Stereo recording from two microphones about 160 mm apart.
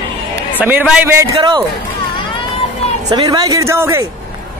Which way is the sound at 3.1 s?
25° right (ahead or behind).